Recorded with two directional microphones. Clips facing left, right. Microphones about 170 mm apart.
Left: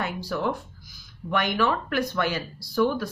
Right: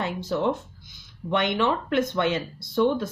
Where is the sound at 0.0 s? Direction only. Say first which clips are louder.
Right 2 dB; 25° right (ahead or behind).